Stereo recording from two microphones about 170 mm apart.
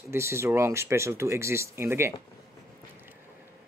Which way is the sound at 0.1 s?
15° right (ahead or behind).